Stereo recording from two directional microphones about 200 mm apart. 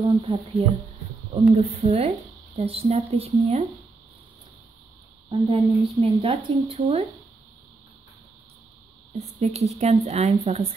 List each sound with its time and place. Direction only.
0.0 s a woman's voice: 25° right (ahead or behind)
5.3 s a woman's voice: 30° right (ahead or behind)
9.1 s speech: 35° right (ahead or behind)